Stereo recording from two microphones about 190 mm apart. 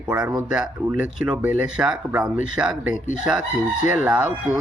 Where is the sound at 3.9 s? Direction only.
10° right (ahead or behind).